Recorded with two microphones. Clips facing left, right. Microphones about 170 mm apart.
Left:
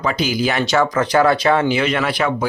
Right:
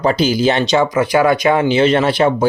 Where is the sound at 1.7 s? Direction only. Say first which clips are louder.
Right 6 dB; 30° right (ahead or behind).